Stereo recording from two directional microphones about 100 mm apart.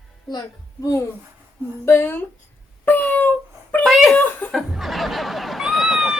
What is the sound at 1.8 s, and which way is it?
Speech, 25° left (ahead or behind).